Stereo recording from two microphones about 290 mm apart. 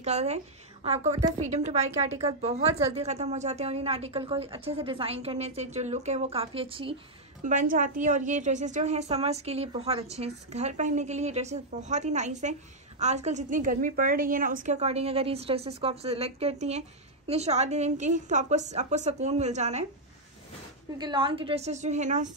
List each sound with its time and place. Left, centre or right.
0.0 s a woman's voice: right
1.9 s a woman's voice: centre
2.2 s a woman's voice: right
21.0 s a woman's voice: centre